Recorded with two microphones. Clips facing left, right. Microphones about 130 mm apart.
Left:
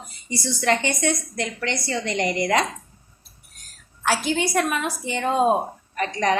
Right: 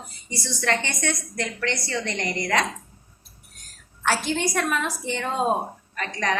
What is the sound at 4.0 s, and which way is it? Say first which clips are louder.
A woman's voice: left 2 dB; 5° left (ahead or behind).